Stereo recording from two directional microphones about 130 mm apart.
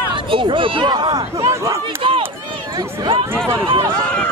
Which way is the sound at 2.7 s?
35° right (ahead or behind).